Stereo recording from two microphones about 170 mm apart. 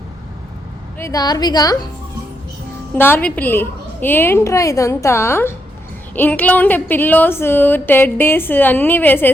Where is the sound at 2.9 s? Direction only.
10° left (ahead or behind).